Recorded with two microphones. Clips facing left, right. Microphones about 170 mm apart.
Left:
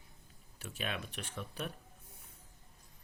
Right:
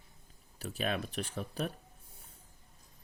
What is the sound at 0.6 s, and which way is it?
Speech, 40° right (ahead or behind).